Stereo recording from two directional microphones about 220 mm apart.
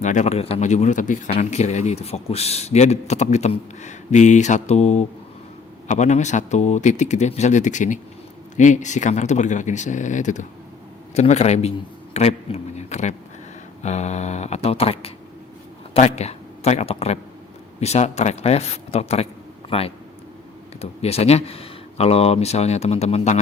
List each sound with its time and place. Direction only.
0.0 s speech: 35° left (ahead or behind)
21.0 s speech: 30° left (ahead or behind)